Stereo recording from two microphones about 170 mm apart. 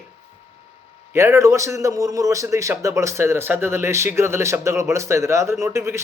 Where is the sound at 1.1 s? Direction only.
15° right (ahead or behind).